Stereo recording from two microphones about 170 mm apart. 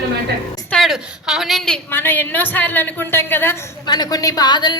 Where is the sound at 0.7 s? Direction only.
Centre (ahead or behind).